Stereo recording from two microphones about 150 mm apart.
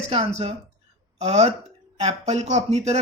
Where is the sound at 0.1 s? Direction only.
45° right (ahead or behind).